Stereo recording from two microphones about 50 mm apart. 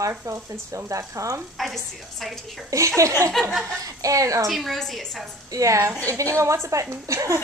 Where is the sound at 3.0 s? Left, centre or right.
Right.